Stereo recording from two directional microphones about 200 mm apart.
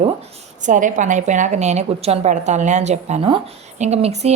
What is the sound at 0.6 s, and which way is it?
A woman's voice, 40° right (ahead or behind).